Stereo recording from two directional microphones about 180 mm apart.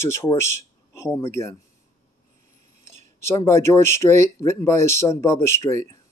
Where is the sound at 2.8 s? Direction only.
15° left (ahead or behind).